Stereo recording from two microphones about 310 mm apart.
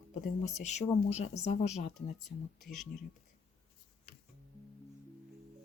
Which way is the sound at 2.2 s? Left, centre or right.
Centre.